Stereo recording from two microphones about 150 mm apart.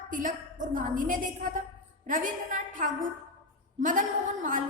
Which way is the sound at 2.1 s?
60° right (ahead or behind).